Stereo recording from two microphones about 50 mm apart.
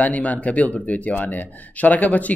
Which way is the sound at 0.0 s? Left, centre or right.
Left.